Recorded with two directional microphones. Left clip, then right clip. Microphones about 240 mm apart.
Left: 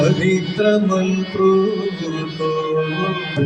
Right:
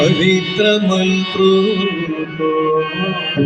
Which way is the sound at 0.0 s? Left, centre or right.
Left.